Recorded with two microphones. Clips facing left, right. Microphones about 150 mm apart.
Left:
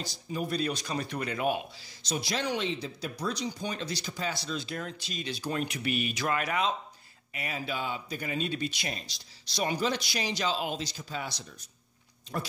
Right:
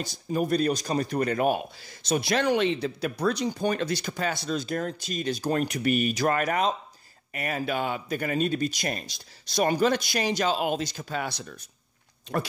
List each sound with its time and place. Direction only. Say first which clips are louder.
0.0 s speech: right 7 dB; 50° right (ahead or behind)